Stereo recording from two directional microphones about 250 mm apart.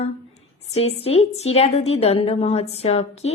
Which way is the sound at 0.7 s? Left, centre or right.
Left.